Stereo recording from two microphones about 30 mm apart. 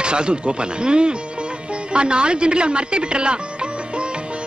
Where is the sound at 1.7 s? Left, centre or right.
Right.